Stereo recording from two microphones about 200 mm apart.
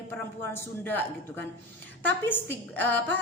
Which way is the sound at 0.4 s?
10° left (ahead or behind).